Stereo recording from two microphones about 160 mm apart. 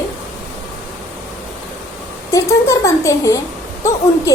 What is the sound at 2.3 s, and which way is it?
A woman's voice, 20° left (ahead or behind).